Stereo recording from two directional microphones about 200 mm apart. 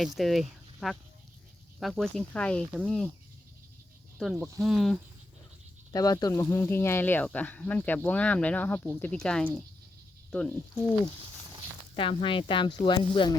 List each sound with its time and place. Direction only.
0.2 s speech: centre (ahead or behind)
4.2 s speech: centre (ahead or behind)
5.9 s speech: 20° left (ahead or behind)
11.9 s speech: 25° left (ahead or behind)